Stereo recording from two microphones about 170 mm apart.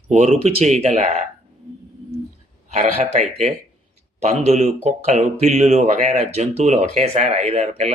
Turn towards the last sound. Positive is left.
turn(degrees=-40)  # may be behind; listen again after turning